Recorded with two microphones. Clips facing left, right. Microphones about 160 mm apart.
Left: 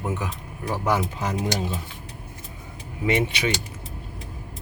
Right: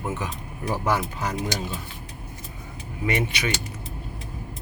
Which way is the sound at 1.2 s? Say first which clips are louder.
Left 2 dB; 20° left (ahead or behind).